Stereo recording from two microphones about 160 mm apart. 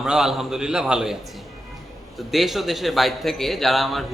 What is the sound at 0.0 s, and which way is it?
A man's voice, centre (ahead or behind).